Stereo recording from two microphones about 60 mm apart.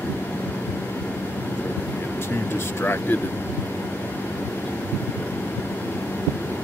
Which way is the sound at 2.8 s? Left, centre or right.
Left.